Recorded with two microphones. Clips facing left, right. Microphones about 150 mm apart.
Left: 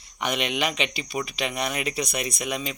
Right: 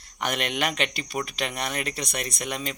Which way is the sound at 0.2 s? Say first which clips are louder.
Left 1 dB; centre (ahead or behind).